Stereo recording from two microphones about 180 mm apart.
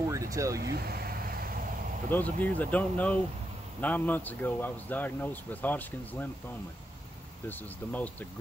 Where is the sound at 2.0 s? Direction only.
10° left (ahead or behind).